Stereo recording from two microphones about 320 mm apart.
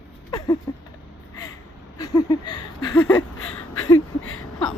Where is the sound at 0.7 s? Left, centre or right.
Centre.